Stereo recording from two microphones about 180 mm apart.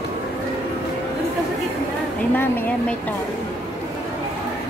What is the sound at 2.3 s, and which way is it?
Speech, 10° left (ahead or behind).